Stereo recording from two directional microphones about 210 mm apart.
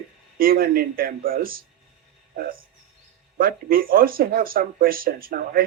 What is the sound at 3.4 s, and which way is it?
Speech, 45° right (ahead or behind).